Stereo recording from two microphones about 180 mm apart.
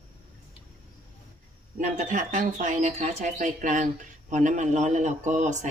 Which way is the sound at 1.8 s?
45° right (ahead or behind).